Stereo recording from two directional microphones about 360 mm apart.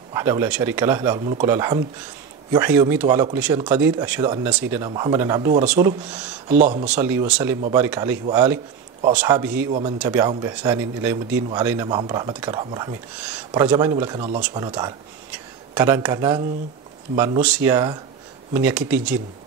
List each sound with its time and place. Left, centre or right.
0.1 s speech: centre
6.5 s speech: centre
6.9 s speech: centre
9.7 s speech: centre